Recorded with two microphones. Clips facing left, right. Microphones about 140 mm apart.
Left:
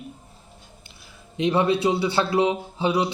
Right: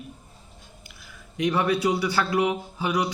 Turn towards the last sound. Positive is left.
turn(degrees=25)  # may be behind; listen again after turning